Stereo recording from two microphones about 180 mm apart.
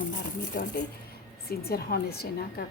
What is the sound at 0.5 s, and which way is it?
Speech, 60° left (ahead or behind).